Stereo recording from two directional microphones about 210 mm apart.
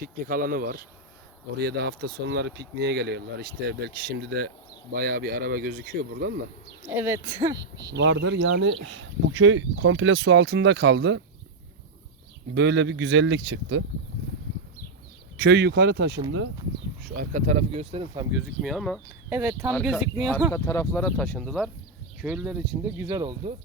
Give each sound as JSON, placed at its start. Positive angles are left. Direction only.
{"t": 0.0, "sound": "speech", "side_deg": -45}
{"t": 7.0, "sound": "speech", "side_deg": -15}
{"t": 7.9, "sound": "speech", "side_deg": -55}
{"t": 12.5, "sound": "speech", "side_deg": -55}
{"t": 15.4, "sound": "speech", "side_deg": -55}
{"t": 17.2, "sound": "speech", "side_deg": -35}
{"t": 18.3, "sound": "speech", "side_deg": 0}
{"t": 20.5, "sound": "speech", "side_deg": 15}